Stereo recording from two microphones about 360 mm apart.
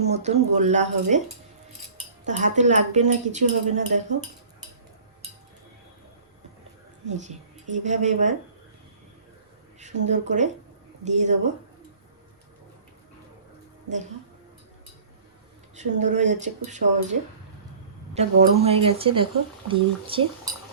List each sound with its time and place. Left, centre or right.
0.1 s a woman's voice: centre
2.2 s a woman's voice: centre
7.1 s a woman's voice: centre
9.8 s a woman's voice: centre
15.7 s a woman's voice: centre